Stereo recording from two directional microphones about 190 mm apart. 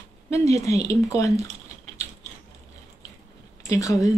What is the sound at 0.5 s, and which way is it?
Speech, 35° right (ahead or behind).